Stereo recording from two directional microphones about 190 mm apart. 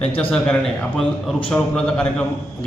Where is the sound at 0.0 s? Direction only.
30° left (ahead or behind).